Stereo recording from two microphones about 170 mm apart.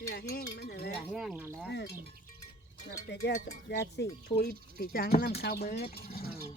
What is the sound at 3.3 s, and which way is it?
Cowbell, 50° left (ahead or behind).